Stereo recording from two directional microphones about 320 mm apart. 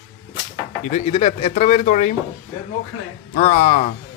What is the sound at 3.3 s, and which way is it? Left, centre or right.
Speech, left.